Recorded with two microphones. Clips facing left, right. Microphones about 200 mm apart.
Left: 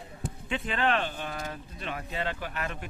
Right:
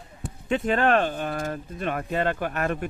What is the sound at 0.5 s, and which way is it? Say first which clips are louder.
Speech: right 7 dB; 45° right (ahead or behind).